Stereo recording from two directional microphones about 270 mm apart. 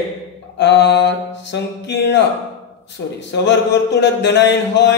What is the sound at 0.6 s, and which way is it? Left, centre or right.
A man's voice, left.